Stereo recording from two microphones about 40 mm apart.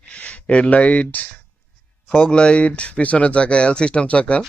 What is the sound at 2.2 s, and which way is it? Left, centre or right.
Speech, left.